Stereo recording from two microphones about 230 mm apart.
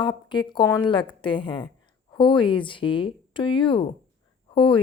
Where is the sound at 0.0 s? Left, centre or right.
Centre.